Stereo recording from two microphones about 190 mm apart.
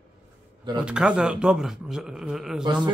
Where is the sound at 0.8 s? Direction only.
5° right (ahead or behind).